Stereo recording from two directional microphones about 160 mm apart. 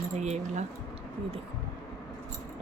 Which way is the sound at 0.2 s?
45° right (ahead or behind).